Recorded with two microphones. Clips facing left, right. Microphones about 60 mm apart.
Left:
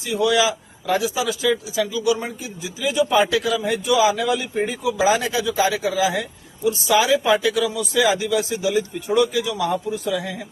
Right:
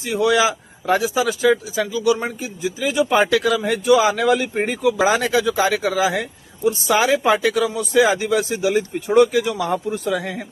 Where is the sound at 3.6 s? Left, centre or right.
Right.